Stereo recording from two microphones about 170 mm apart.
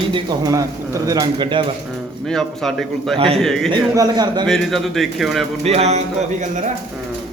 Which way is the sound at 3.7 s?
20° right (ahead or behind).